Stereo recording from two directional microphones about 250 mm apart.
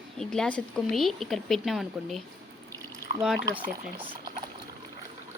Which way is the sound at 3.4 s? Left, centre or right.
Centre.